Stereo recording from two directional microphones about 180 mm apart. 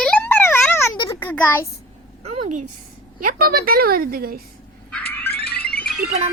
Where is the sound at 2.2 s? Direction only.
40° right (ahead or behind).